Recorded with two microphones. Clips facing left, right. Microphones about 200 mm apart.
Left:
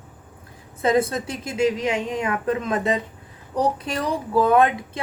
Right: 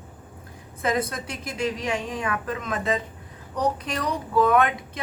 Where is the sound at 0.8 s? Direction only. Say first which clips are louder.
Left 6 dB; 25° left (ahead or behind).